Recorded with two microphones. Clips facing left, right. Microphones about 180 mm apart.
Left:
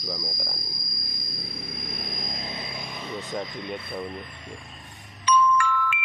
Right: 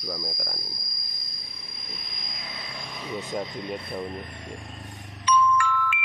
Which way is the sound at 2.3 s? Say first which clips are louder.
Left 5 dB; 25° left (ahead or behind).